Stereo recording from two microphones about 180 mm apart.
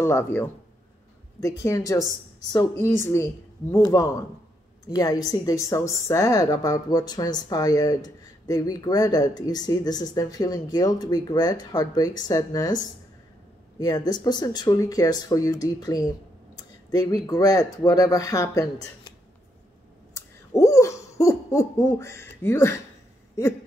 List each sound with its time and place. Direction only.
0.0 s a woman's voice: 15° left (ahead or behind)
13.7 s a woman's voice: 20° left (ahead or behind)
20.2 s hoot: 15° left (ahead or behind)